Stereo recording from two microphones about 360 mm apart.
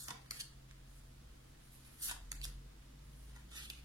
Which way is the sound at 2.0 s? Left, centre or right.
Centre.